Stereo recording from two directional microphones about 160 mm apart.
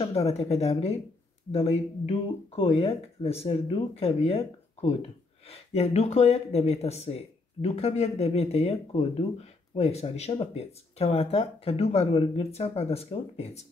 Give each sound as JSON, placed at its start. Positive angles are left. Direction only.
{"t": 0.0, "sound": "speech", "side_deg": 40}